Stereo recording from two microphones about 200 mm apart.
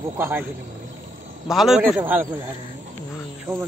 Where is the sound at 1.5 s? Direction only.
Centre (ahead or behind).